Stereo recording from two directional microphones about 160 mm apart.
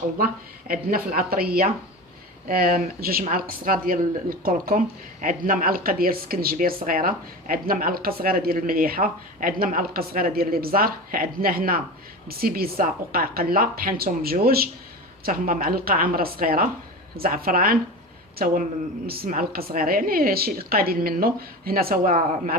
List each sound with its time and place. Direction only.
0.7 s a woman's voice: 65° right (ahead or behind)